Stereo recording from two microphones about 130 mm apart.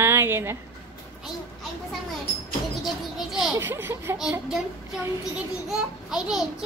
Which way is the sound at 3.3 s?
Centre (ahead or behind).